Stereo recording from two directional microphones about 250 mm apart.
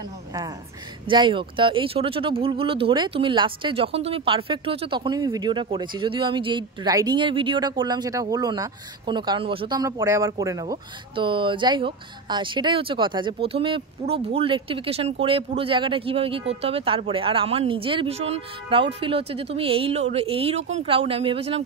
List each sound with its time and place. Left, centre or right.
0.3 s a woman's voice: centre